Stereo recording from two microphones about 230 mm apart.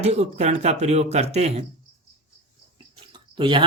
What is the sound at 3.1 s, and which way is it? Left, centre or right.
Drip, right.